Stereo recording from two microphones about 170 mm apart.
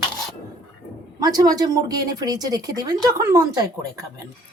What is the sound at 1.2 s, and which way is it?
Speech, 20° right (ahead or behind).